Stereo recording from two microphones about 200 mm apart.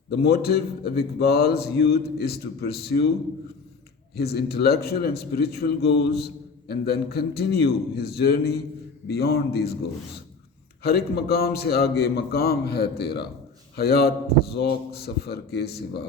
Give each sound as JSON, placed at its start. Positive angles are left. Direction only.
{"t": 0.1, "sound": "speech", "side_deg": 55}
{"t": 4.2, "sound": "speech", "side_deg": 50}
{"t": 10.8, "sound": "a man's voice", "side_deg": 50}